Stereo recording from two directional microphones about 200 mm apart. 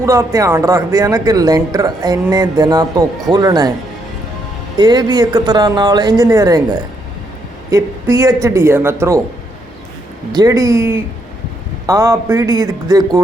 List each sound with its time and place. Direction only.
0.0 s speech: 15° right (ahead or behind)
4.8 s speech: 20° right (ahead or behind)
7.7 s speech: 15° right (ahead or behind)
10.3 s speech: 15° right (ahead or behind)